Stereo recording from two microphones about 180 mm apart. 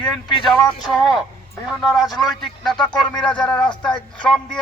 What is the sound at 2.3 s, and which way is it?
Speech, centre (ahead or behind).